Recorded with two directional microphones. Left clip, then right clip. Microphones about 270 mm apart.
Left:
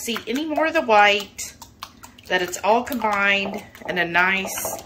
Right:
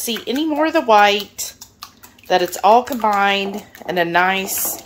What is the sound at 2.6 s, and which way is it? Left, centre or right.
Speech, right.